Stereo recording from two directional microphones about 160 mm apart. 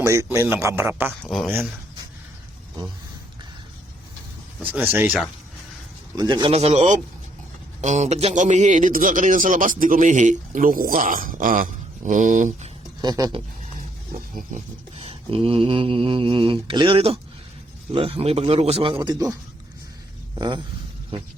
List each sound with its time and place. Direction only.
0.0 s a man's voice: 15° right (ahead or behind)
1.2 s speech: 5° left (ahead or behind)
4.6 s a man's voice: 10° right (ahead or behind)
6.1 s mantra: 25° right (ahead or behind); by 7.0 s 50° right (ahead or behind)
7.8 s a man's voice: 45° right (ahead or behind)
13.0 s speech: 25° right (ahead or behind)
14.1 s wild animals: 50° right (ahead or behind)
14.9 s mantra: 35° right (ahead or behind)
20.4 s mantra: 30° right (ahead or behind)